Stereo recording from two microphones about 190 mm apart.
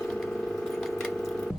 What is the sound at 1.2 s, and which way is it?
Sewing machine, 5° left (ahead or behind).